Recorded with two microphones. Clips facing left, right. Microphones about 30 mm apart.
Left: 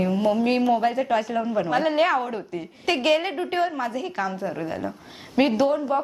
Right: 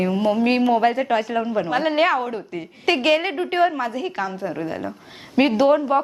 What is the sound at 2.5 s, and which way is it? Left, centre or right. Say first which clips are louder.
Speech: right 5 dB; right.